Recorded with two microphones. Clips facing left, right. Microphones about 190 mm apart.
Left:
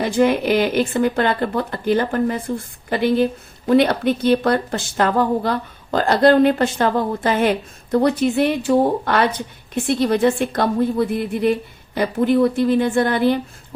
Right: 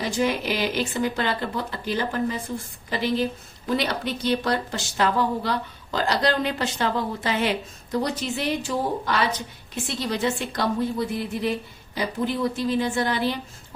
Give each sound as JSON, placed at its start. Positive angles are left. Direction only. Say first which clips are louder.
{"t": 0.0, "sound": "a woman's voice", "louder": "left 8 dB", "side_deg": 60}